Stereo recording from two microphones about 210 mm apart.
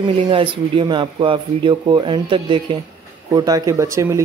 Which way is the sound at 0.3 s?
25° right (ahead or behind).